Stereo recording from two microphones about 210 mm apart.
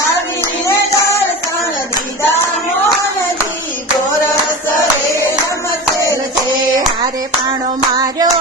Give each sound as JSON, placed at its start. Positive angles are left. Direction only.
{"t": 7.9, "sound": "hands", "side_deg": -15}